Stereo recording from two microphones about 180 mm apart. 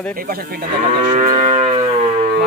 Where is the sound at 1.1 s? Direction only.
35° right (ahead or behind).